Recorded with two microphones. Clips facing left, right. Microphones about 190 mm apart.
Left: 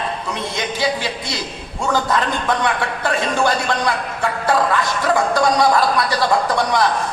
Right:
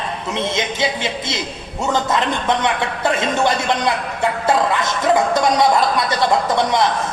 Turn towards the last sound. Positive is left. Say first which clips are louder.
# right 1 dB
turn(degrees=-20)  # may be behind; listen again after turning